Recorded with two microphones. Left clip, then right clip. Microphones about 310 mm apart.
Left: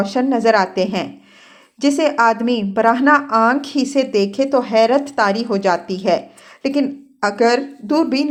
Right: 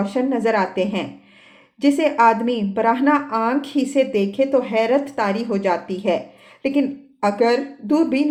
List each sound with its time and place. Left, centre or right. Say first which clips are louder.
0.0 s a woman's voice: left 4 dB; left